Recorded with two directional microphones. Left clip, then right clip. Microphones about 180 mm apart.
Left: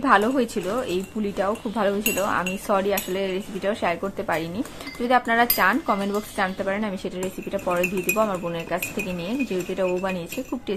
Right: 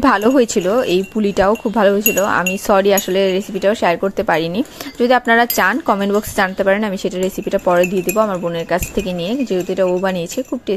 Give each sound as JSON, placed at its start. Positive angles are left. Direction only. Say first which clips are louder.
{"t": 0.0, "sound": "speech", "louder": "right 6 dB", "side_deg": -50}